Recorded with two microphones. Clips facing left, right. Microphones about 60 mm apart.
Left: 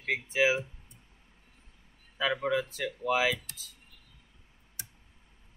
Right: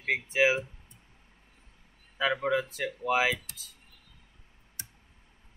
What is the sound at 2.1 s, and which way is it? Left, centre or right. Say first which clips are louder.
Speech: right 1 dB; centre.